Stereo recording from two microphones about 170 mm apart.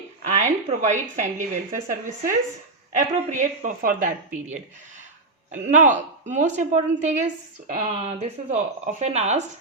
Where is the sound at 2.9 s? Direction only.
45° right (ahead or behind).